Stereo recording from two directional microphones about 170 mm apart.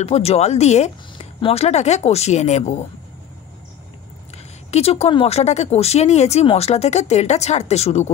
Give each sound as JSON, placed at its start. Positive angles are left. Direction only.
{"t": 0.0, "sound": "speech", "side_deg": 40}
{"t": 4.6, "sound": "speech", "side_deg": 35}